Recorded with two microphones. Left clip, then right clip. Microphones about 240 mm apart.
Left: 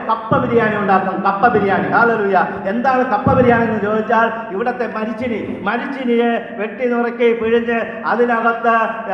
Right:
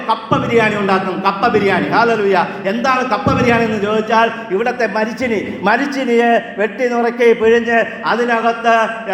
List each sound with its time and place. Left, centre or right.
0.1 s a man's voice: right